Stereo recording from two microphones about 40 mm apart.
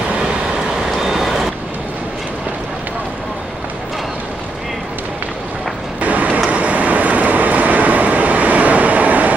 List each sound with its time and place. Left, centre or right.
0.8 s vehicle: centre
5.9 s vehicle: right
6.5 s train: right